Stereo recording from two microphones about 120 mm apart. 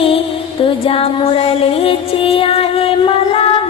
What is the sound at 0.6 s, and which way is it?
Music, 50° left (ahead or behind).